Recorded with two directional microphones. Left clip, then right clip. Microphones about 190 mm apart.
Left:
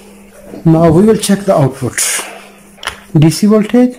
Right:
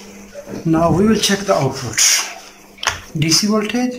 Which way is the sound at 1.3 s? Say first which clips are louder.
Left 3 dB; 25° left (ahead or behind).